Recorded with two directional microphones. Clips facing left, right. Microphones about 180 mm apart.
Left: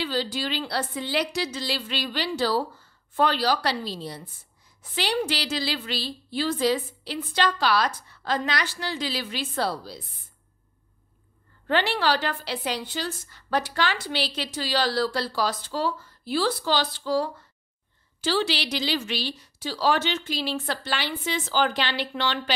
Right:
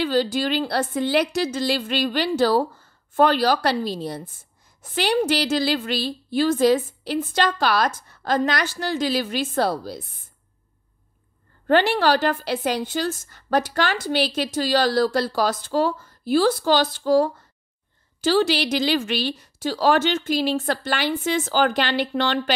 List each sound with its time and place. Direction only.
0.0 s a woman's voice: 50° right (ahead or behind)
11.6 s a woman's voice: 45° right (ahead or behind)